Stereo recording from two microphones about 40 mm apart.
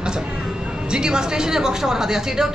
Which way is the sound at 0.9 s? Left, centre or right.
Centre.